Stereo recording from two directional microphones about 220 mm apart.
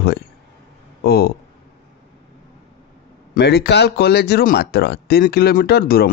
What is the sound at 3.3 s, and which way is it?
Speech, 45° left (ahead or behind).